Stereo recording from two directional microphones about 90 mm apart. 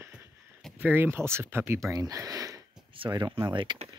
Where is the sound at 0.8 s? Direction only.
20° right (ahead or behind).